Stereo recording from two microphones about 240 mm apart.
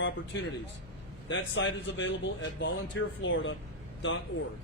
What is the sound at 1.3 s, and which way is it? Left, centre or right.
A man's voice, left.